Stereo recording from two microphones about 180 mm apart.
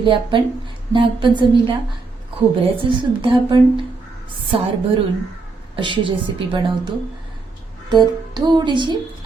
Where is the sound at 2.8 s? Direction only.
30° right (ahead or behind).